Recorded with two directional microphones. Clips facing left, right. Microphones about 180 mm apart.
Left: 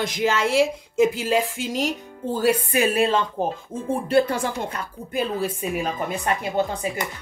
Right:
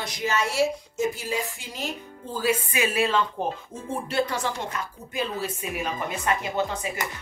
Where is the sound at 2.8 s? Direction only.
35° left (ahead or behind).